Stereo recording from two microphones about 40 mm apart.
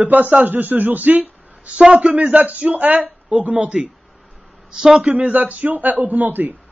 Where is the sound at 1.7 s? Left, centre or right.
Right.